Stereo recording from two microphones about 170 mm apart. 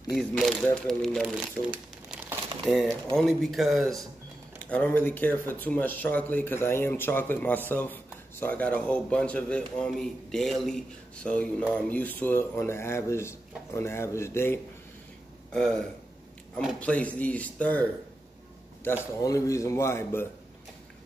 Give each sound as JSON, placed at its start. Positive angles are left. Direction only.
{"t": 0.1, "sound": "speech", "side_deg": 0}
{"t": 1.2, "sound": "crumpling", "side_deg": -5}
{"t": 2.6, "sound": "speech", "side_deg": 0}
{"t": 15.5, "sound": "speech", "side_deg": 5}
{"t": 19.2, "sound": "speech", "side_deg": 20}